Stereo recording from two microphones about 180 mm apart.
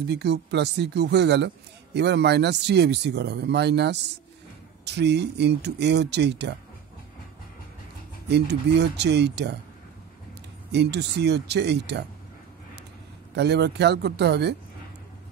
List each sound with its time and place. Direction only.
0.0 s speech: 70° right (ahead or behind)
8.3 s speech: 70° right (ahead or behind)
10.7 s speech: 70° right (ahead or behind)
13.3 s speech: 70° right (ahead or behind)